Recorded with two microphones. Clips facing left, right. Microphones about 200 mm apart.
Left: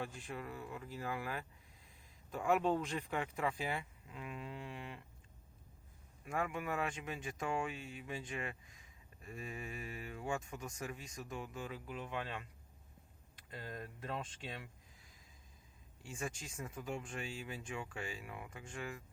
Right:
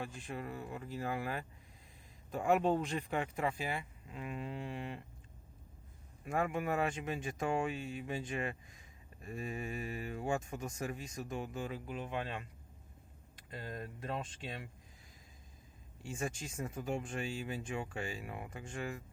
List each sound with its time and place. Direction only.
0.3 s speech: 30° right (ahead or behind)
3.6 s speech: 15° right (ahead or behind)
4.1 s speech: 35° right (ahead or behind)
6.2 s speech: 35° right (ahead or behind)
13.5 s speech: 30° right (ahead or behind)
16.1 s speech: 40° right (ahead or behind)